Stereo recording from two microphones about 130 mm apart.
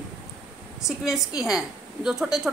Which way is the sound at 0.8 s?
Centre (ahead or behind).